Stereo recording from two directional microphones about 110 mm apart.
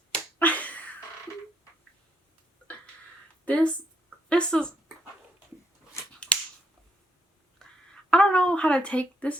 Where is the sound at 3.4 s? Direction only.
10° left (ahead or behind).